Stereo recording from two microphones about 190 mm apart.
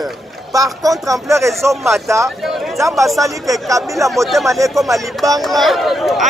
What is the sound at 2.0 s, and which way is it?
Speech, 15° right (ahead or behind).